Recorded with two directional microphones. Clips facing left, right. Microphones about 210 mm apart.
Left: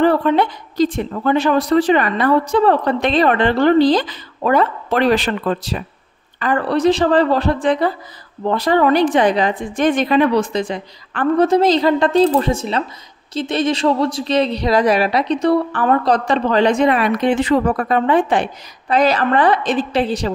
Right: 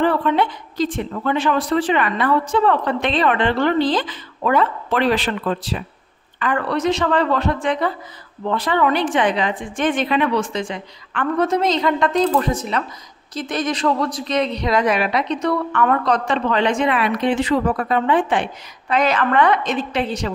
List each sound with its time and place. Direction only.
0.0 s speech: 40° left (ahead or behind)